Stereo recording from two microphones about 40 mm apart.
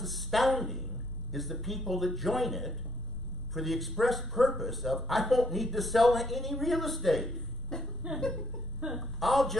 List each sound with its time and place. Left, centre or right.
0.0 s a sound: centre
1.3 s a man's voice: centre
7.7 s speech: centre
9.0 s a man's voice: centre